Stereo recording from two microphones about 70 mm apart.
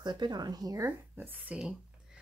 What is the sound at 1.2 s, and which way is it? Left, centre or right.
Speech, right.